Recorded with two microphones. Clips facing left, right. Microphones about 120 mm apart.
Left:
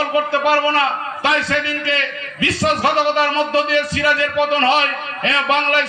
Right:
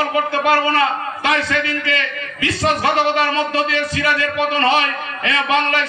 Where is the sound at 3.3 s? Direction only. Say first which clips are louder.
Left 2 dB; 25° left (ahead or behind).